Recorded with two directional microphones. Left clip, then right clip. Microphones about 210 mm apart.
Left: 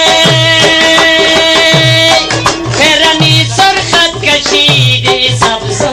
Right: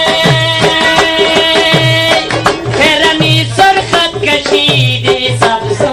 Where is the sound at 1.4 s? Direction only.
15° right (ahead or behind).